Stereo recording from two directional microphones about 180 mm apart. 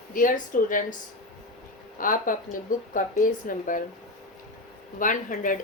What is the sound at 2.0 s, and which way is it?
Speech, 50° left (ahead or behind).